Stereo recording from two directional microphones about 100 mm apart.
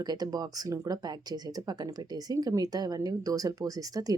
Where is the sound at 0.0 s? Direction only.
40° right (ahead or behind).